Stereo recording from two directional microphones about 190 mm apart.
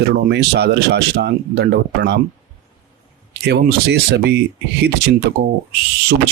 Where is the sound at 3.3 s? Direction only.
60° right (ahead or behind).